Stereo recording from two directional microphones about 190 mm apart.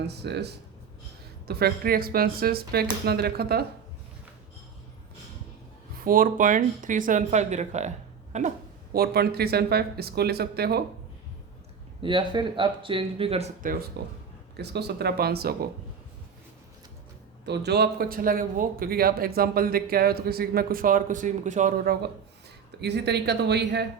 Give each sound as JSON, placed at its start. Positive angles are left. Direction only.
{"t": 0.1, "sound": "speech", "side_deg": -60}
{"t": 6.1, "sound": "speech", "side_deg": -45}
{"t": 12.0, "sound": "speech", "side_deg": -25}
{"t": 13.6, "sound": "speech", "side_deg": -45}
{"t": 14.5, "sound": "speech", "side_deg": -60}
{"t": 17.4, "sound": "speech", "side_deg": -60}
{"t": 22.8, "sound": "speech", "side_deg": -60}